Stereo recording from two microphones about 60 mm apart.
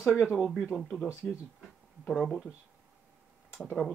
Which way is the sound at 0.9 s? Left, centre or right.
Left.